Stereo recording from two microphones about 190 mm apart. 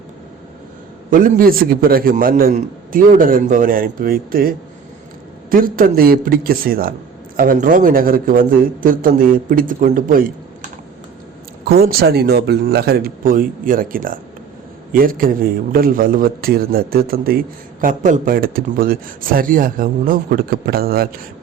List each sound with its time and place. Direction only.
1.1 s a man's voice: 45° right (ahead or behind)
11.7 s a man's voice: 55° right (ahead or behind)